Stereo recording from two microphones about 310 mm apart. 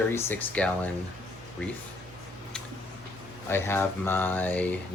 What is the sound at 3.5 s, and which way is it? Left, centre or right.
Speech, centre.